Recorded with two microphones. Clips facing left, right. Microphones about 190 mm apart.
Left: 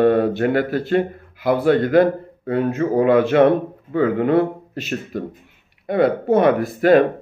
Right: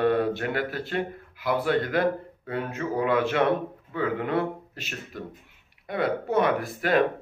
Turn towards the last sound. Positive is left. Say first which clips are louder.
# left 9 dB
turn(degrees=50)  # may be behind; listen again after turning